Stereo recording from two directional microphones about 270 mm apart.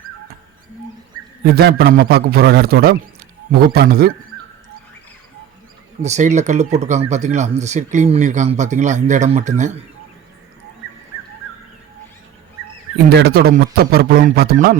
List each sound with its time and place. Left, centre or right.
1.5 s a man's voice: right
6.0 s speech: right
13.1 s a man's voice: right